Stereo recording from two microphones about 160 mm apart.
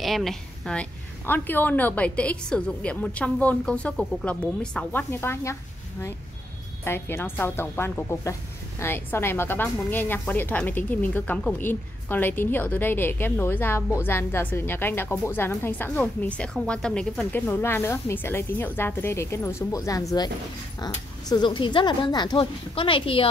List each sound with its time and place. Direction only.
0.0 s speech: centre (ahead or behind); by 23.2 s 35° left (ahead or behind)